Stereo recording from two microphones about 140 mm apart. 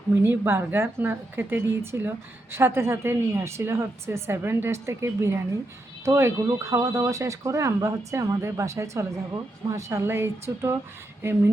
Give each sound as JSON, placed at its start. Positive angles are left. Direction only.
{"t": 0.2, "sound": "a woman's voice", "side_deg": -15}